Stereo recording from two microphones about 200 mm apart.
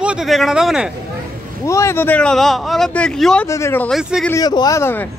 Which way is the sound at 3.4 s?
15° left (ahead or behind).